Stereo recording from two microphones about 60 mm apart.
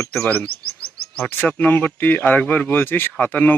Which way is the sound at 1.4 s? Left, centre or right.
Left.